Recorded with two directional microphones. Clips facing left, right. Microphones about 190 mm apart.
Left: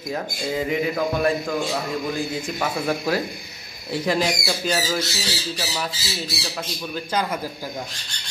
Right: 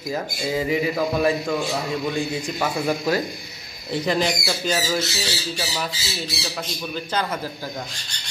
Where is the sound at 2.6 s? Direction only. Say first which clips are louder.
Right 1 dB; centre (ahead or behind).